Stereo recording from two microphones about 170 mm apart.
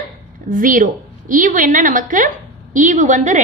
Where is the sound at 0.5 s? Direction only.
50° right (ahead or behind).